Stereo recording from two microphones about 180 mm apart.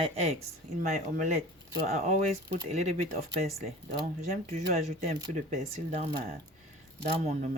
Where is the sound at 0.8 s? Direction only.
40° right (ahead or behind).